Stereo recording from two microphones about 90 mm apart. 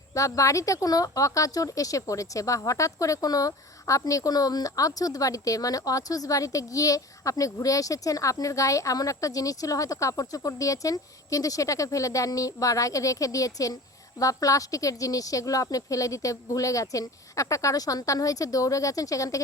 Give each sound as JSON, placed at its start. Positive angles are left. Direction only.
{"t": 0.1, "sound": "a woman's voice", "side_deg": 35}